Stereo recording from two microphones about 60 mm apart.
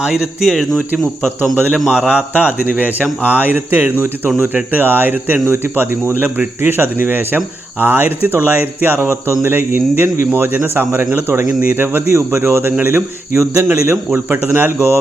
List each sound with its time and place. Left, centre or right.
0.0 s speech: centre
1.5 s a man's voice: centre
1.9 s speech: centre; by 12.0 s right
12.1 s speech: right
13.3 s speech: right
13.8 s speech: right